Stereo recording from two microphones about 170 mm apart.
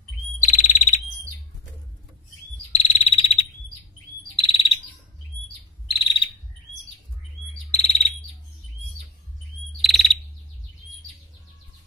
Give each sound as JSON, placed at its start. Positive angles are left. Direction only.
{"t": 0.4, "sound": "bird", "side_deg": 45}
{"t": 2.7, "sound": "cricket", "side_deg": 35}
{"t": 4.4, "sound": "chirp", "side_deg": 30}
{"t": 5.9, "sound": "bird", "side_deg": 30}
{"t": 7.7, "sound": "bird", "side_deg": 35}
{"t": 9.8, "sound": "bird vocalization", "side_deg": 0}